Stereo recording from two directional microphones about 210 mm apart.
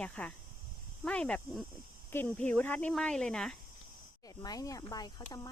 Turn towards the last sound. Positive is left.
turn(degrees=20)  # may be behind; listen again after turning